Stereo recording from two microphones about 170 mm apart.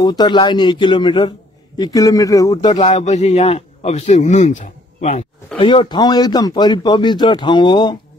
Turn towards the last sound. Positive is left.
turn(degrees=25)  # may be behind; listen again after turning